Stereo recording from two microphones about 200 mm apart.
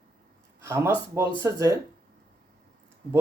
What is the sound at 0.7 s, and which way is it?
Speech, 15° right (ahead or behind).